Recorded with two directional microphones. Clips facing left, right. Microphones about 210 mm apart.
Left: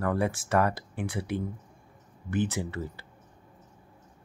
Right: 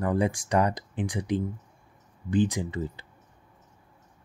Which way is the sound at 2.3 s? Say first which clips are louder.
Right 4 dB; 15° right (ahead or behind).